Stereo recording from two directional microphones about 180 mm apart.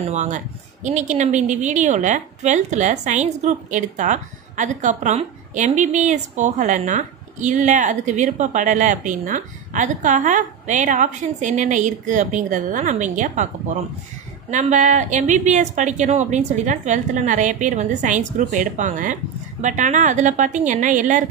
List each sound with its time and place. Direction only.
0.0 s a woman's voice: 40° right (ahead or behind)
14.5 s a woman's voice: 40° right (ahead or behind)